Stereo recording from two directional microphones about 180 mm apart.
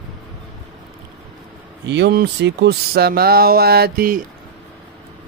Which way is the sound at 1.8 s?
70° right (ahead or behind).